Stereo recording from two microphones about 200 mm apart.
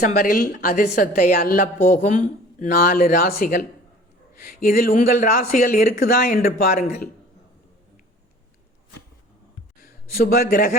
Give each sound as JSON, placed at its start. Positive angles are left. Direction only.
{"t": 0.0, "sound": "a woman's voice", "side_deg": 45}
{"t": 9.8, "sound": "a man's voice", "side_deg": 50}